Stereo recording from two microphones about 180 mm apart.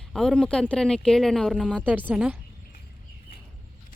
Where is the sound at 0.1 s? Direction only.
5° left (ahead or behind).